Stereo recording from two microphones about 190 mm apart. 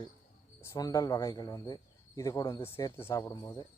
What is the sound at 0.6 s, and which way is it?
Speech, 15° left (ahead or behind).